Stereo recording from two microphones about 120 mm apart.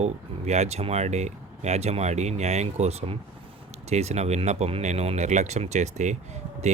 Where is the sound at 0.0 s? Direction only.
70° right (ahead or behind).